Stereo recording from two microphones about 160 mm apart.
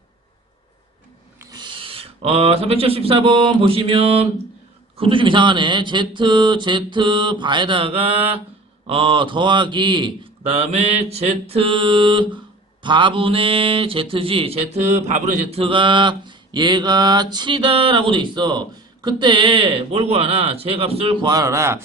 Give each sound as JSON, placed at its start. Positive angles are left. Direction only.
{"t": 1.4, "sound": "speech", "side_deg": -25}
{"t": 21.2, "sound": "speech", "side_deg": -20}